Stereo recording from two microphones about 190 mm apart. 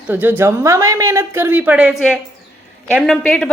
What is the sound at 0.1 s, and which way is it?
A woman's voice, 10° right (ahead or behind).